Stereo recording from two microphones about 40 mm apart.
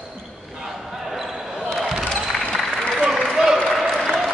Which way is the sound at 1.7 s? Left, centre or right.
Centre.